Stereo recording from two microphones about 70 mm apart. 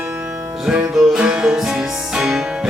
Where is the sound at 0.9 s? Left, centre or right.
Centre.